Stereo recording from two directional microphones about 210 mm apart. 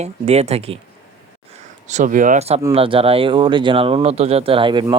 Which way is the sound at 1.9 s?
35° right (ahead or behind).